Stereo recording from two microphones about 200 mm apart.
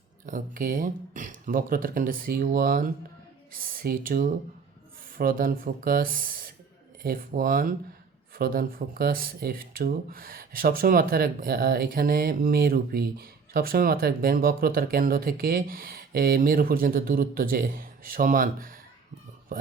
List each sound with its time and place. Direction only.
0.3 s speech: 40° right (ahead or behind)